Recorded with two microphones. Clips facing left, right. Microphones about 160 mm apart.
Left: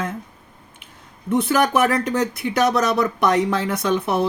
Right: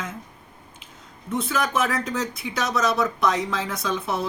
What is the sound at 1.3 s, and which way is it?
Speech, 65° left (ahead or behind).